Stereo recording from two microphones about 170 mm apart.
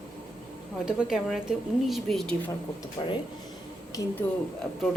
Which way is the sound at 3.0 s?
30° left (ahead or behind).